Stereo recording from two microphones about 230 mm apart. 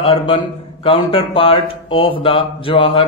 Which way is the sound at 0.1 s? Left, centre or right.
Left.